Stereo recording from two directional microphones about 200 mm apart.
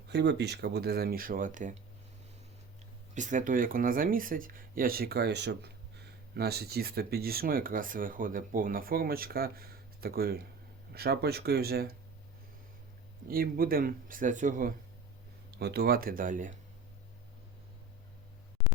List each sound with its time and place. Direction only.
0.1 s speech: 60° right (ahead or behind); by 1.8 s 40° right (ahead or behind)
3.2 s speech: 40° right (ahead or behind)
13.2 s speech: 45° right (ahead or behind)
15.5 s speech: 50° right (ahead or behind)